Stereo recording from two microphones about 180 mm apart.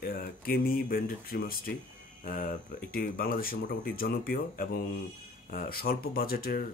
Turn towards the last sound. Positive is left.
turn(degrees=55)  # may be behind; listen again after turning